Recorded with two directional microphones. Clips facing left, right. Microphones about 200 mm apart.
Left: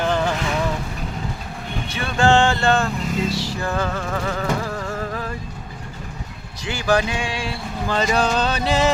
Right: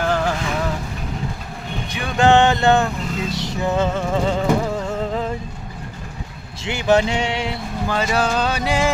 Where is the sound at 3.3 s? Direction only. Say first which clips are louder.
Right 3 dB; 20° right (ahead or behind).